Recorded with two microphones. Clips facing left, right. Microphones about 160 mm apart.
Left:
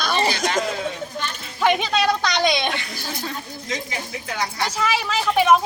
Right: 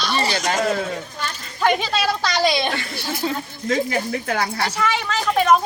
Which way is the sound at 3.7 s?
50° right (ahead or behind).